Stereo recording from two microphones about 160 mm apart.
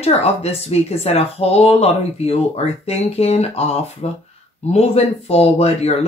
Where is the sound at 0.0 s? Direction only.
40° left (ahead or behind).